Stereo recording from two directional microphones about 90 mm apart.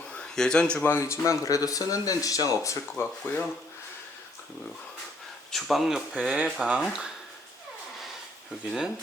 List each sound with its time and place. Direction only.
0.1 s a sound: 10° left (ahead or behind)
0.9 s speech: 30° left (ahead or behind)
3.0 s speech: 20° left (ahead or behind)
5.5 s speech: centre (ahead or behind)
6.1 s speech: 15° right (ahead or behind)